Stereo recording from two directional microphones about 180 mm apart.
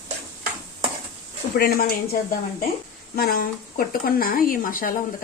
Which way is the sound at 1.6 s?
55° left (ahead or behind).